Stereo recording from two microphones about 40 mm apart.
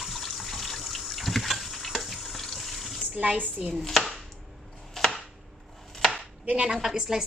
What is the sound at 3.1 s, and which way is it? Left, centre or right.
Speech, right.